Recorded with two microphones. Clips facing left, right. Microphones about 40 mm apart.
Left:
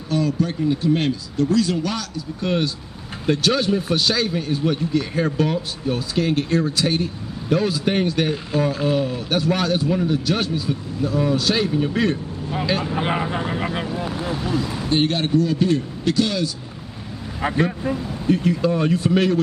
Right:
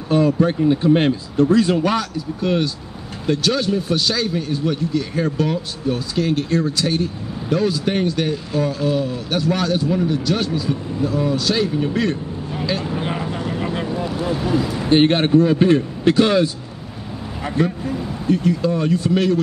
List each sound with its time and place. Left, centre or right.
0.1 s speech: right
2.4 s speech: centre
12.9 s speech: left
13.9 s speech: centre
14.9 s speech: right
17.6 s speech: left
18.2 s speech: centre